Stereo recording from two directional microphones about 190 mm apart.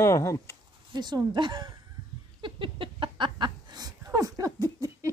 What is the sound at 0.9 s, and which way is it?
Speech, 20° right (ahead or behind).